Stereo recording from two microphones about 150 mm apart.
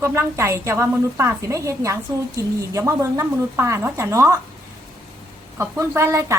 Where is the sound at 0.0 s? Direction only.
15° right (ahead or behind).